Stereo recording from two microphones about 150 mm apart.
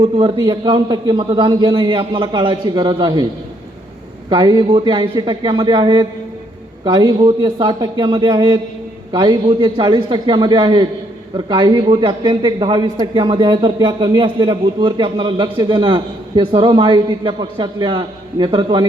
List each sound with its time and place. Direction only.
0.0 s a man's voice: 35° right (ahead or behind)
4.3 s a man's voice: 30° right (ahead or behind)